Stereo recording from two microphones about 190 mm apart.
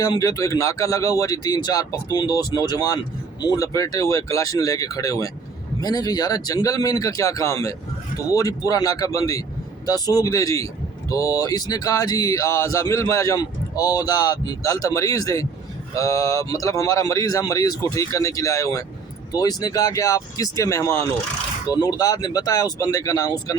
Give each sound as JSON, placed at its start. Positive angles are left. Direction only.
{"t": 0.0, "sound": "speech", "side_deg": 20}